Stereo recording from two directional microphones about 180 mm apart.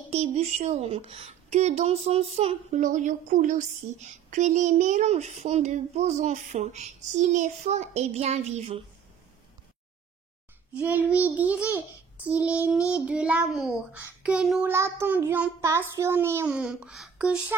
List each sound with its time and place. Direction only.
0.1 s a woman's voice: 35° right (ahead or behind)
10.7 s a child's voice: 10° right (ahead or behind)
14.7 s a child's voice: 15° right (ahead or behind)